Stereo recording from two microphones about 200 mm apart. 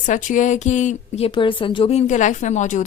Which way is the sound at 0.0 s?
40° left (ahead or behind).